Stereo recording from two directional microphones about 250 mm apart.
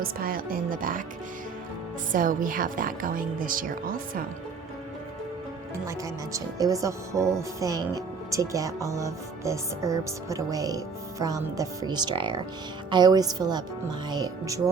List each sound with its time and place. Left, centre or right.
0.0 s a woman's voice: right
2.1 s a woman's voice: right
6.3 s speech: centre